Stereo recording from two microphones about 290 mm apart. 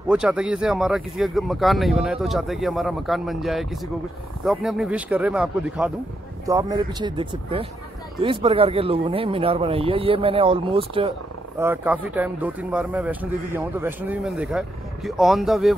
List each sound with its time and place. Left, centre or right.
0.1 s speech: centre
11.6 s speech: centre